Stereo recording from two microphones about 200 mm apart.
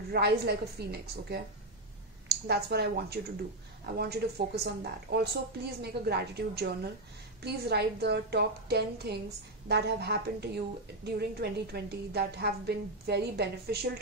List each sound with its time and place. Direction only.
0.1 s a woman's voice: 55° right (ahead or behind)